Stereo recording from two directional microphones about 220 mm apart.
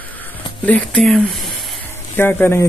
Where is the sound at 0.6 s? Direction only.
5° left (ahead or behind).